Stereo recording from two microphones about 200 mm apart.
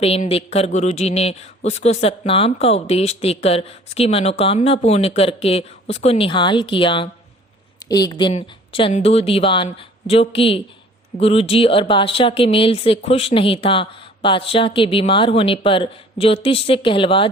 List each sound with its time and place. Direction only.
0.0 s a man's voice: 30° left (ahead or behind)